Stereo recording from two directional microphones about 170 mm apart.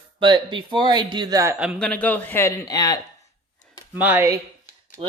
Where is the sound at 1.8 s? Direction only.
5° left (ahead or behind).